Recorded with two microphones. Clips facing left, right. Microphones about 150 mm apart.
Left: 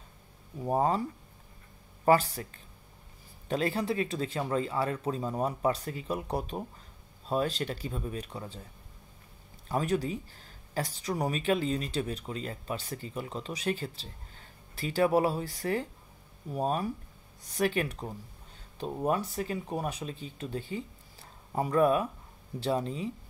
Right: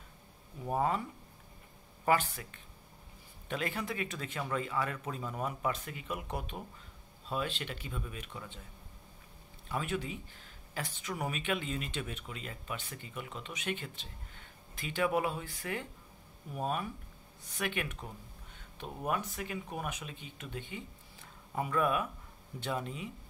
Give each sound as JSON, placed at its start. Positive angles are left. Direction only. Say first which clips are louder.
{"t": 0.7, "sound": "speech", "louder": "left 4 dB", "side_deg": 35}
{"t": 2.0, "sound": "speech", "louder": "left 6 dB", "side_deg": 35}
{"t": 9.7, "sound": "speech", "louder": "left 7 dB", "side_deg": 40}